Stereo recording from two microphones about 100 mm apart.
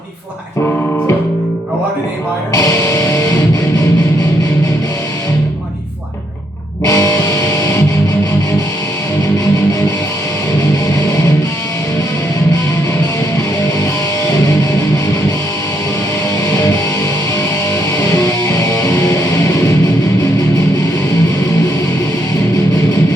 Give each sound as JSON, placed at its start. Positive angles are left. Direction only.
{"t": 2.5, "sound": "speech", "side_deg": 35}
{"t": 6.8, "sound": "music", "side_deg": 35}